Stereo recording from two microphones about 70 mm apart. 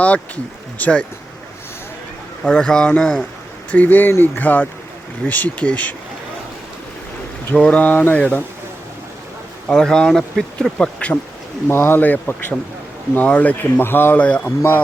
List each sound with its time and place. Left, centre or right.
0.8 s speech: centre
2.4 s speech: centre
3.7 s speech: left
7.5 s speech: centre
9.6 s speech: centre
11.7 s speech: left
12.0 s speech: left